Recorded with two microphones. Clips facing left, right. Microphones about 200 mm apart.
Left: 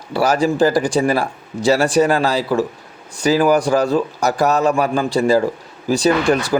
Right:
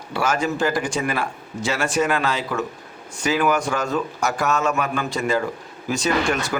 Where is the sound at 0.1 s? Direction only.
35° left (ahead or behind).